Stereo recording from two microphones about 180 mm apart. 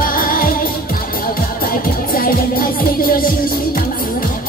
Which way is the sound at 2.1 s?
50° left (ahead or behind).